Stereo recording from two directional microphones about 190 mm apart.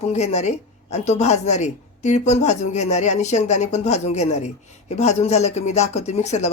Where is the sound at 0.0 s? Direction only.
35° left (ahead or behind).